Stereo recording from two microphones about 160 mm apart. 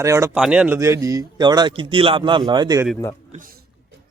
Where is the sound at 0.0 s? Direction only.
20° right (ahead or behind).